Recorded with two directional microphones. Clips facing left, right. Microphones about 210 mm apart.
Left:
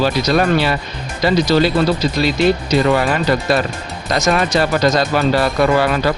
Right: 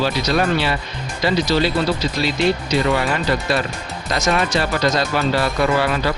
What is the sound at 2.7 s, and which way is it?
Speech, 40° left (ahead or behind).